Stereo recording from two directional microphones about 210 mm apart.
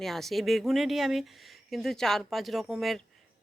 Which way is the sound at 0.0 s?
Centre (ahead or behind).